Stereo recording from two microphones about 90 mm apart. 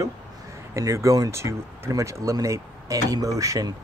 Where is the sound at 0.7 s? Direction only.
35° right (ahead or behind).